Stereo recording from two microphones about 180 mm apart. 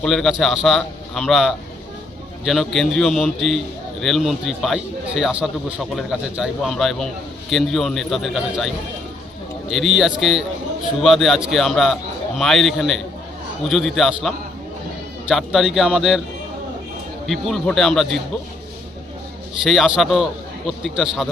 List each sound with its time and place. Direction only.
0.0 s a man's voice: 5° left (ahead or behind)
15.3 s a man's voice: centre (ahead or behind)
17.2 s a man's voice: centre (ahead or behind)
19.6 s a man's voice: centre (ahead or behind)